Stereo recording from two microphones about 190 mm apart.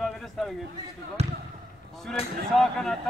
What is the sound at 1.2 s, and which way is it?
Speech, 35° right (ahead or behind).